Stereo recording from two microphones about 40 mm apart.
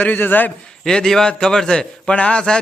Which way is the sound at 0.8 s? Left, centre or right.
Centre.